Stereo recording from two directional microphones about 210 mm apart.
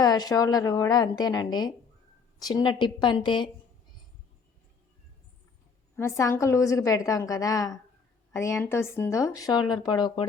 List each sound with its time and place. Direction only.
0.0 s a woman's voice: 20° left (ahead or behind)
6.0 s speech: 15° left (ahead or behind)